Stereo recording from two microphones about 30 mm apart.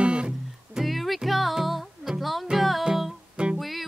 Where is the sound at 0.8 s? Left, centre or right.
Centre.